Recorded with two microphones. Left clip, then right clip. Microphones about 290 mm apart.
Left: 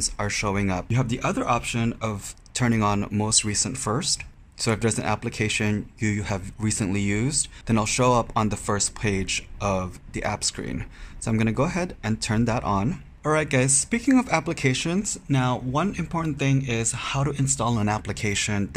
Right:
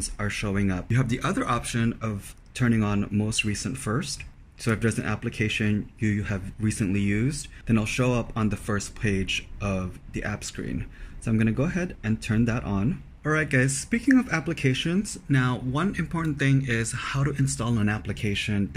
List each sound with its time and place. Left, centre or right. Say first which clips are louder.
0.0 s speech: left 5 dB; centre